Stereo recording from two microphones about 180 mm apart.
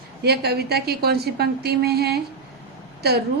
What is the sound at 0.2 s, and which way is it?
Speech, 60° right (ahead or behind).